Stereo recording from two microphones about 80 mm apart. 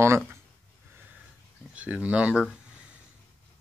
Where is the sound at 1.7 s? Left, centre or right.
Centre.